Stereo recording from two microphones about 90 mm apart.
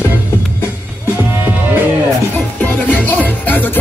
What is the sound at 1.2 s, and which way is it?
Music, 25° right (ahead or behind).